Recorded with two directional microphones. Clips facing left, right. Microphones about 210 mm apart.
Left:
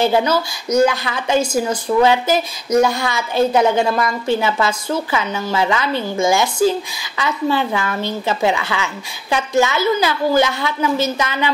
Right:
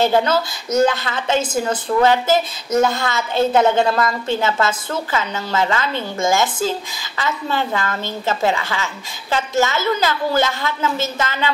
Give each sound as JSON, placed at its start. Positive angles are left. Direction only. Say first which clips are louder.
{"t": 0.0, "sound": "a woman's voice", "louder": "even", "side_deg": 15}